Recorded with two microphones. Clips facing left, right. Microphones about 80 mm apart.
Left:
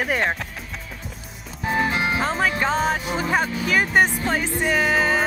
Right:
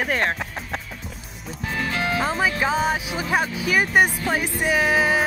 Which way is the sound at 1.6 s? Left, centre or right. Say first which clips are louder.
Left 3 dB; left.